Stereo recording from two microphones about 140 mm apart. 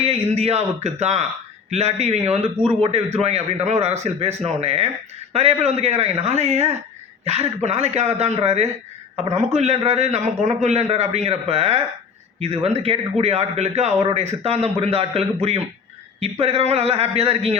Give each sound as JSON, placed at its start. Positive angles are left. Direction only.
{"t": 0.0, "sound": "speech", "side_deg": -45}